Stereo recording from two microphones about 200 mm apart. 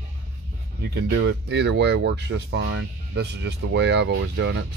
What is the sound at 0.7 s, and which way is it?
Speech, 55° right (ahead or behind).